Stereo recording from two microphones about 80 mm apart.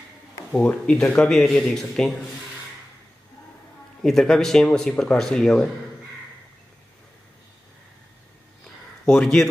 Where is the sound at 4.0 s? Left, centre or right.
Centre.